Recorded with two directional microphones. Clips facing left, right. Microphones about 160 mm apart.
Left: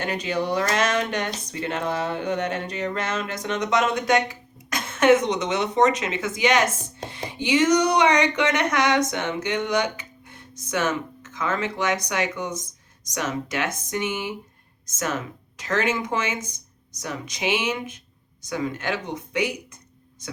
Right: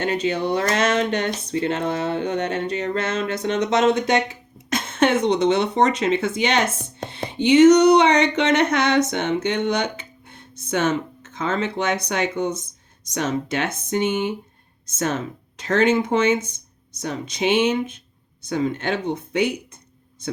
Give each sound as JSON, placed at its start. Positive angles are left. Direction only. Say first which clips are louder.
{"t": 0.0, "sound": "speech", "louder": "right 4 dB", "side_deg": -25}
{"t": 7.1, "sound": "a sound", "louder": "right 6 dB", "side_deg": -30}
{"t": 13.1, "sound": "speech", "louder": "right 4 dB", "side_deg": -30}